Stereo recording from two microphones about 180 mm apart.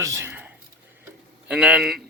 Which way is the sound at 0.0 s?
15° right (ahead or behind).